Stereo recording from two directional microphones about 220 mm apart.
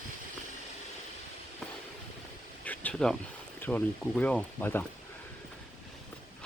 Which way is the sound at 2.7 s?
5° left (ahead or behind).